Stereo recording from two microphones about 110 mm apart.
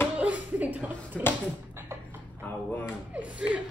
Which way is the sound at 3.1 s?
10° right (ahead or behind).